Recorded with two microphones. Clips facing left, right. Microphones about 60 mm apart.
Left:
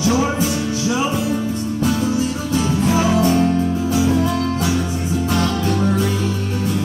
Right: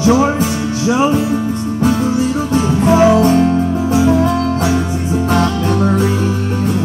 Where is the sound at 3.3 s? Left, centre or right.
Right.